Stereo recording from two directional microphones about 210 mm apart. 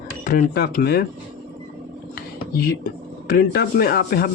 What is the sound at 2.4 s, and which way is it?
Speech, 45° left (ahead or behind).